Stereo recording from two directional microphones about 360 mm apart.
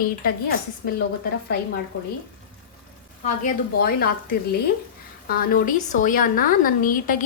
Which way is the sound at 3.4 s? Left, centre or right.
Left.